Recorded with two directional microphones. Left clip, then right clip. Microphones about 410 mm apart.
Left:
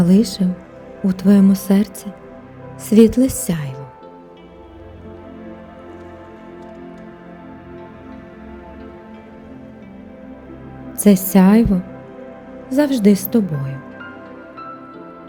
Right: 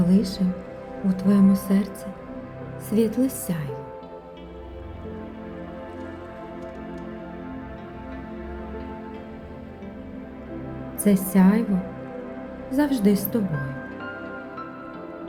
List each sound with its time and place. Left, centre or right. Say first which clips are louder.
0.0 s speech: left 7 dB; left
2.9 s speech: left 10 dB; left
11.0 s speech: left 7 dB; left
12.7 s speech: left 7 dB; centre